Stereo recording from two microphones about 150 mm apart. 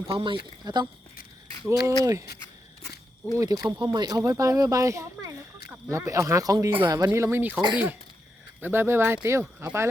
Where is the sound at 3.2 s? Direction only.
20° right (ahead or behind).